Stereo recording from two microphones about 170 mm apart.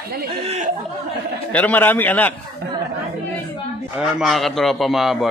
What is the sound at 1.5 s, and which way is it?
Speech, 10° left (ahead or behind).